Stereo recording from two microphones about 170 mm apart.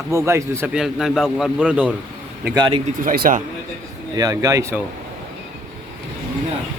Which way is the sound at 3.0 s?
55° right (ahead or behind).